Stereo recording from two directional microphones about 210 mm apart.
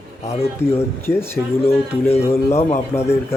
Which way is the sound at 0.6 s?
10° left (ahead or behind).